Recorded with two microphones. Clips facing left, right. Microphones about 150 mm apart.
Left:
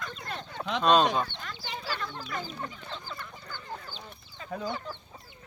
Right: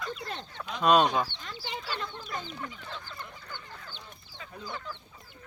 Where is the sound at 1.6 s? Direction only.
20° right (ahead or behind).